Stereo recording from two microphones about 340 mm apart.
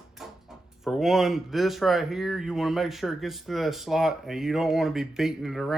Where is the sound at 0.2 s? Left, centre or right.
Centre.